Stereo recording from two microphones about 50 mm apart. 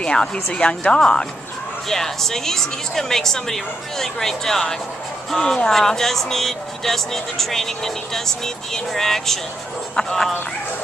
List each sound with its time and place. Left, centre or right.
0.0 s speech: centre
1.9 s speech: centre